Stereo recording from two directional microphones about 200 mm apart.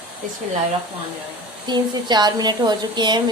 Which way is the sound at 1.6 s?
20° right (ahead or behind).